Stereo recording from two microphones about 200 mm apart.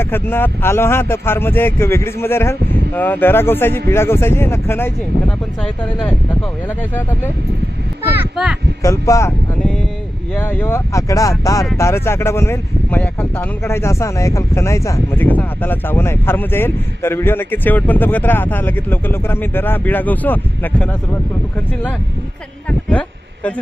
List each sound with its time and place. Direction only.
0.0 s speech: 10° left (ahead or behind)
8.0 s a child's voice: 10° right (ahead or behind)
8.8 s speech: 15° left (ahead or behind)
10.3 s speech: 10° left (ahead or behind)
22.9 s a sound: 5° left (ahead or behind)